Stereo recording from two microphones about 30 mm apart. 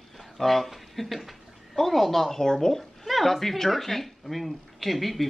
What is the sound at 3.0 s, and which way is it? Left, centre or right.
Speech, centre.